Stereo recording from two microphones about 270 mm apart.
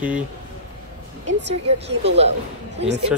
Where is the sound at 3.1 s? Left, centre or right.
Centre.